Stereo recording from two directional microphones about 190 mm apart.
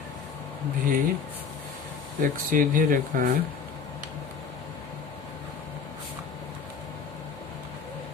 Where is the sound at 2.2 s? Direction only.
45° right (ahead or behind).